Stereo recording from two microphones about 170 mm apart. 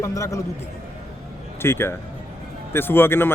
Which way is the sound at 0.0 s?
20° left (ahead or behind).